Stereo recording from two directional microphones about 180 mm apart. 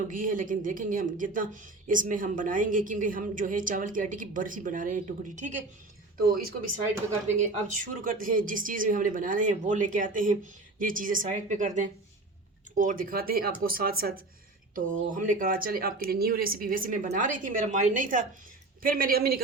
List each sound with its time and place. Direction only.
0.1 s a woman's voice: 50° right (ahead or behind)
6.1 s a woman's voice: 55° right (ahead or behind)